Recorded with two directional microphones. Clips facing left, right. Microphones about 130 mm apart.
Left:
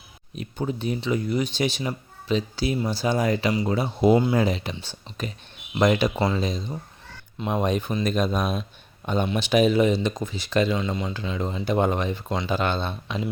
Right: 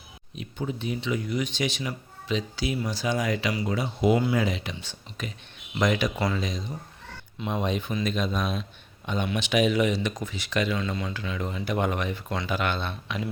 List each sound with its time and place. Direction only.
0.3 s speech: 40° left (ahead or behind)
7.4 s speech: 50° left (ahead or behind); by 13.2 s 30° left (ahead or behind)